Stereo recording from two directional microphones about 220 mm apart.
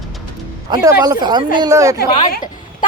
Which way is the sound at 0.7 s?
15° right (ahead or behind).